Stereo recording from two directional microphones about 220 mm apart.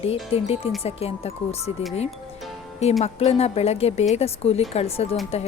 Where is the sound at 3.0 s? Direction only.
30° left (ahead or behind).